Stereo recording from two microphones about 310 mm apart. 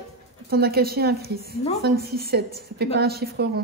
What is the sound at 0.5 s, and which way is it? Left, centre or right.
A woman's voice, right.